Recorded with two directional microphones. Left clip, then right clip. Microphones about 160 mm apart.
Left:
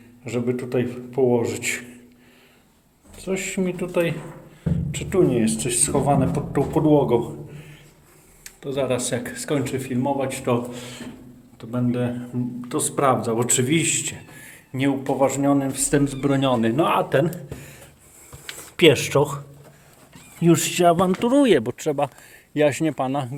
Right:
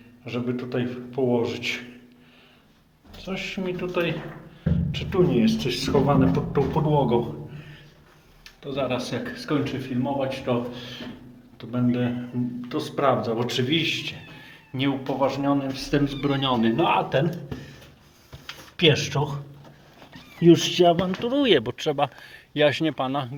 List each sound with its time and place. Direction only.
0.3 s a man's voice: 35° left (ahead or behind)
0.5 s speech: 45° left (ahead or behind)
3.2 s a man's voice: 35° left (ahead or behind)
8.6 s speech: 40° left (ahead or behind)
11.5 s a man's voice: 25° left (ahead or behind); by 14.2 s 45° left (ahead or behind)
14.7 s a man's voice: 30° left (ahead or behind)
18.8 s speech: 65° left (ahead or behind)
20.4 s a man's voice: 40° left (ahead or behind)
21.5 s speech: 30° left (ahead or behind)